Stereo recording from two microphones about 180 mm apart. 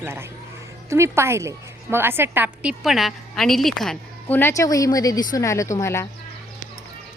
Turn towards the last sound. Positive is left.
turn(degrees=15)  # may be behind; listen again after turning